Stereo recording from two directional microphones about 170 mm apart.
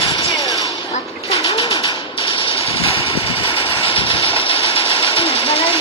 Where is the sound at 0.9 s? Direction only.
30° left (ahead or behind).